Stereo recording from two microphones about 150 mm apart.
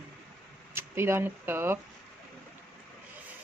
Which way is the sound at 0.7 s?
15° right (ahead or behind).